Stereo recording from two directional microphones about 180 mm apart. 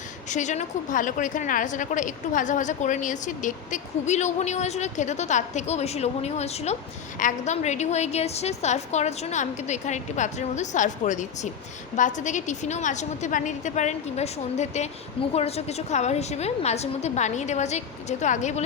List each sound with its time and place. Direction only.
0.3 s a woman's voice: 40° left (ahead or behind)